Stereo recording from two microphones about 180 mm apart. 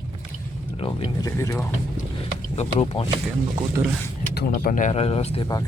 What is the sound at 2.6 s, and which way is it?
Speech, 35° left (ahead or behind).